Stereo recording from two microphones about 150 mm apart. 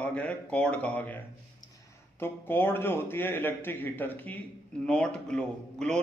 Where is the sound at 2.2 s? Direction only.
15° left (ahead or behind).